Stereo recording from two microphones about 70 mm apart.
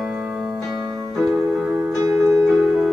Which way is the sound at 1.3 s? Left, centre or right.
Right.